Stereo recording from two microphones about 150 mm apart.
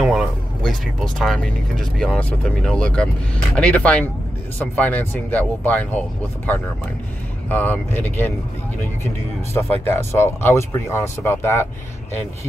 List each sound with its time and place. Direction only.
0.0 s speech: centre (ahead or behind)
9.5 s speech: 15° left (ahead or behind)